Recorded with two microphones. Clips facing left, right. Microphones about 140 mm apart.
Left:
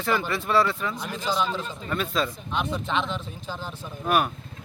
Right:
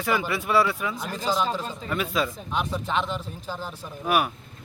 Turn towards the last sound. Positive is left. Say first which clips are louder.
# even
turn(degrees=-10)  # may be behind; listen again after turning